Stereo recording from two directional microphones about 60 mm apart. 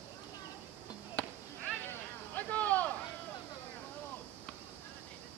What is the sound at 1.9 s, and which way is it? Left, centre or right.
Vehicle, left.